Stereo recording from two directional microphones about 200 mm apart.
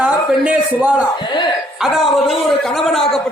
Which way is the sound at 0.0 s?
5° right (ahead or behind).